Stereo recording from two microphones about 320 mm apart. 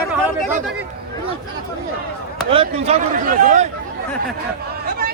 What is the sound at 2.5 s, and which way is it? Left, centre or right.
Speech, centre.